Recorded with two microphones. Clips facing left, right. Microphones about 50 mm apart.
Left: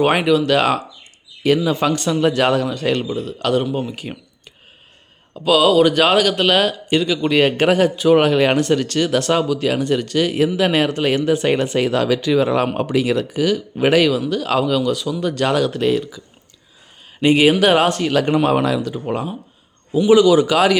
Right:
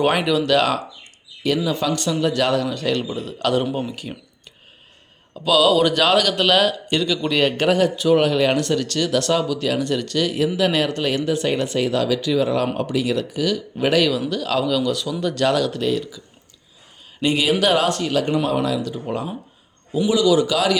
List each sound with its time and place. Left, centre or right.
0.0 s a man's voice: centre
1.6 s speech: left
2.3 s a man's voice: left
3.2 s a man's voice: centre
3.8 s speech: centre
5.3 s a man's voice: centre
14.1 s speech: centre
14.4 s a man's voice: left
18.0 s speech: left
18.8 s a man's voice: left